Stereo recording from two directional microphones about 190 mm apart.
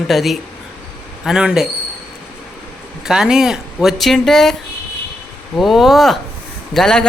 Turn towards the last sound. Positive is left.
turn(degrees=5)  # may be behind; listen again after turning